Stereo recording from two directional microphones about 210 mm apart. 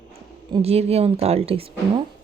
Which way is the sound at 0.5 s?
30° right (ahead or behind).